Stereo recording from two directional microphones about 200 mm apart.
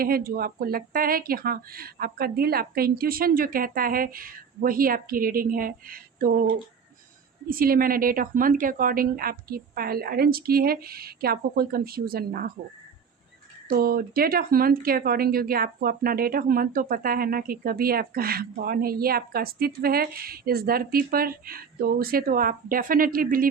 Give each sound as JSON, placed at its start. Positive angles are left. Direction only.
{"t": 0.0, "sound": "speech", "side_deg": -45}
{"t": 7.4, "sound": "speech", "side_deg": -45}
{"t": 13.7, "sound": "speech", "side_deg": -50}